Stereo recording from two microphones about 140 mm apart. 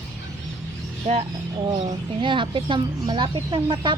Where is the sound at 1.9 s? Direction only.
35° right (ahead or behind).